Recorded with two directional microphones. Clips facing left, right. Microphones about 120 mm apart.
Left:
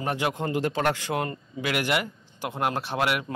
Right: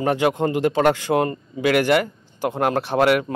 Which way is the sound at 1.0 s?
45° right (ahead or behind).